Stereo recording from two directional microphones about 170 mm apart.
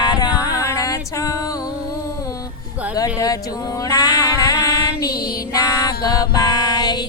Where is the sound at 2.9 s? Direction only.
20° left (ahead or behind).